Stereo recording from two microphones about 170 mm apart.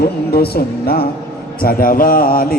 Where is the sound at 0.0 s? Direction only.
65° left (ahead or behind).